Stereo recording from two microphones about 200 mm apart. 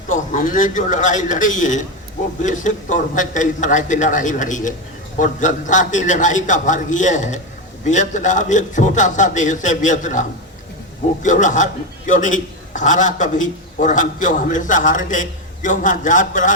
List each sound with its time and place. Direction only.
0.1 s a man's voice: 40° left (ahead or behind)